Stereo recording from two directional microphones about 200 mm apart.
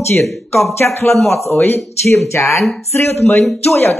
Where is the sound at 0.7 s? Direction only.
15° left (ahead or behind).